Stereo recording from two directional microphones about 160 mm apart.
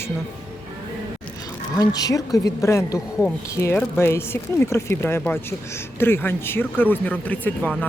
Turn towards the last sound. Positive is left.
turn(degrees=10)  # may be behind; listen again after turning